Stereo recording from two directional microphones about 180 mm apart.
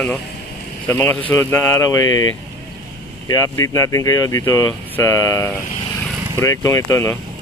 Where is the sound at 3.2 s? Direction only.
15° left (ahead or behind).